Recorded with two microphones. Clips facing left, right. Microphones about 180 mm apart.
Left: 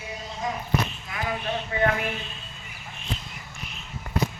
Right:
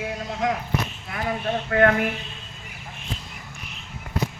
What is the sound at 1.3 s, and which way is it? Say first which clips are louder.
Speech: right 4 dB; 45° right (ahead or behind).